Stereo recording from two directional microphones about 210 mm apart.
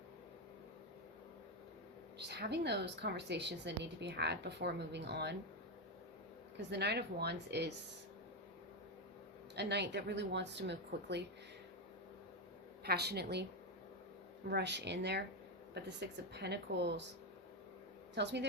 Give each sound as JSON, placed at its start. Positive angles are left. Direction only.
{"t": 2.1, "sound": "a woman's voice", "side_deg": -55}
{"t": 6.6, "sound": "a woman's voice", "side_deg": -55}
{"t": 9.6, "sound": "speech", "side_deg": -55}
{"t": 12.8, "sound": "a woman's voice", "side_deg": -50}
{"t": 14.5, "sound": "a woman's voice", "side_deg": -55}
{"t": 18.1, "sound": "speech", "side_deg": -55}